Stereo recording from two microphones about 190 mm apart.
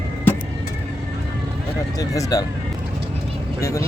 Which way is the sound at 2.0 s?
20° left (ahead or behind).